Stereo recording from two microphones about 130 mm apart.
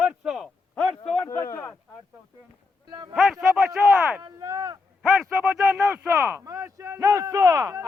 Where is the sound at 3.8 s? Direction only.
15° right (ahead or behind).